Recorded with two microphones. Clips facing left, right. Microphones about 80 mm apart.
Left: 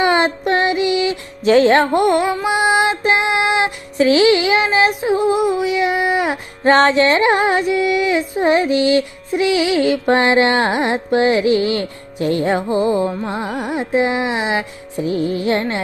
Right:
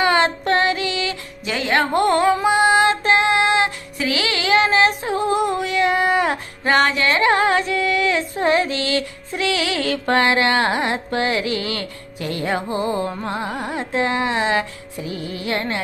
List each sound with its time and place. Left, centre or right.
0.0 s female singing: centre
1.5 s music: left; by 6.3 s centre
6.7 s music: left